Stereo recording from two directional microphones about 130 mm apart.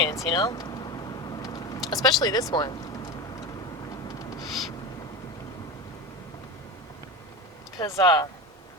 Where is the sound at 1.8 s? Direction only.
30° left (ahead or behind).